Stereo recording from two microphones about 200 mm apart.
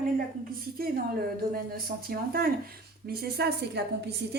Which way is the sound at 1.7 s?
50° right (ahead or behind).